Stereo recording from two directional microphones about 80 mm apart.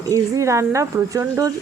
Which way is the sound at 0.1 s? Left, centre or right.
Right.